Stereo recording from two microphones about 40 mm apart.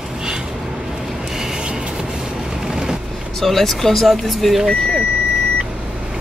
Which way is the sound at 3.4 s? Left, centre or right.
Centre.